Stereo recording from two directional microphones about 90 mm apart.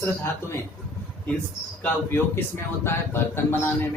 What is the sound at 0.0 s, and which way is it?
Speech, 30° left (ahead or behind).